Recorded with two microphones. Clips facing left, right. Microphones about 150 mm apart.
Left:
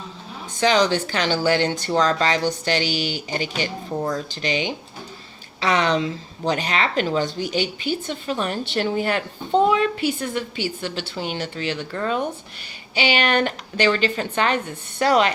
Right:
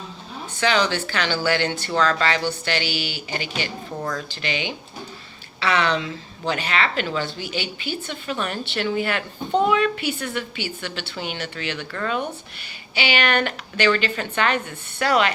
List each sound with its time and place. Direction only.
0.6 s a woman's voice: 40° left (ahead or behind)
11.9 s speech: 25° left (ahead or behind)
13.0 s a woman's voice: 35° left (ahead or behind)